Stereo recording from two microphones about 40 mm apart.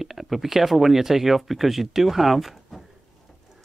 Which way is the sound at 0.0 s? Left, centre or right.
Centre.